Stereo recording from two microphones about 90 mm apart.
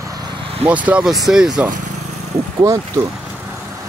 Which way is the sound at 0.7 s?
15° right (ahead or behind).